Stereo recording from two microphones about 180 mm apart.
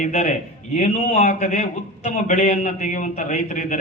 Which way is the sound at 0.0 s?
40° left (ahead or behind).